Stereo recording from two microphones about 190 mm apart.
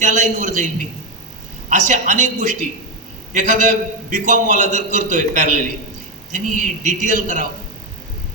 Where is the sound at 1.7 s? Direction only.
40° right (ahead or behind).